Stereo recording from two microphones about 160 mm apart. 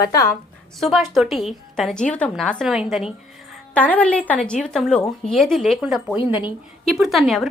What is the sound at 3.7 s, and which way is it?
A woman's voice, 10° left (ahead or behind).